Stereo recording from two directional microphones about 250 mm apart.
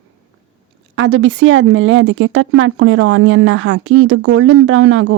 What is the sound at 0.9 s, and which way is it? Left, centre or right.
Speech, right.